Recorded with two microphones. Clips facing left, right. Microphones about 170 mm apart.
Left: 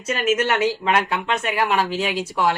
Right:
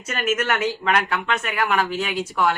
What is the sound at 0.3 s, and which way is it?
Speech, 30° left (ahead or behind).